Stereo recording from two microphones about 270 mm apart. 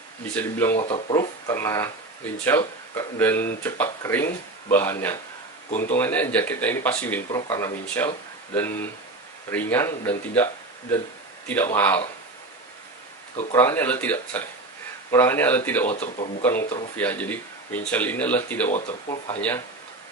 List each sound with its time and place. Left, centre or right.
0.3 s speech: centre
0.7 s speech: left
1.1 s speech: centre
13.5 s speech: centre
15.9 s speech: left
16.9 s speech: centre
18.7 s speech: left